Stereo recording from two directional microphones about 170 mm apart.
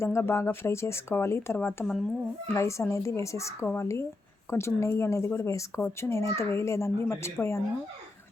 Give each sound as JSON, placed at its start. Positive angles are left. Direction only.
{"t": 0.0, "sound": "speech", "side_deg": 15}
{"t": 2.5, "sound": "speech", "side_deg": 15}